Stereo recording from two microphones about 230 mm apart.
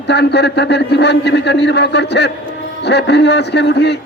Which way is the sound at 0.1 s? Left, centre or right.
Left.